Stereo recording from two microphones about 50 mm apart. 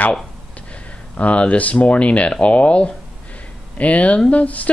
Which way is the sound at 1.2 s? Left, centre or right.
Left.